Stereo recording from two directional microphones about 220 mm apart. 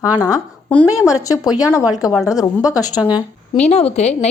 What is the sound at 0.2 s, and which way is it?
Speech, 10° left (ahead or behind).